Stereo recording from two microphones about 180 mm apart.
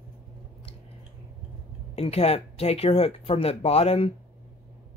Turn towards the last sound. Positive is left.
turn(degrees=35)  # may be behind; listen again after turning